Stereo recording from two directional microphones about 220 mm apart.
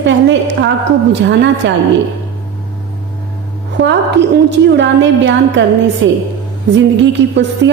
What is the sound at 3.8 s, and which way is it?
A woman's voice, 50° right (ahead or behind).